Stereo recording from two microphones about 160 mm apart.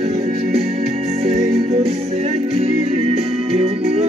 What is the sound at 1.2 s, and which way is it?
Music, 40° right (ahead or behind).